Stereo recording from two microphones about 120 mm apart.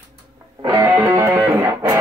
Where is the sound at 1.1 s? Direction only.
25° right (ahead or behind).